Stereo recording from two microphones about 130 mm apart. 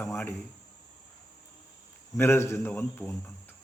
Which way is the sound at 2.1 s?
20° left (ahead or behind).